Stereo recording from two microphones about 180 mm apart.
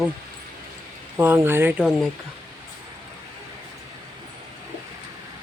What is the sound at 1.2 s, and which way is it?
Speech, 10° right (ahead or behind).